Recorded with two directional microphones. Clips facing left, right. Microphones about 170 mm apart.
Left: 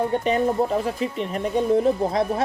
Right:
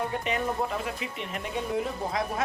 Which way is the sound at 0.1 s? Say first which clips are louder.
Left 8 dB; 35° left (ahead or behind).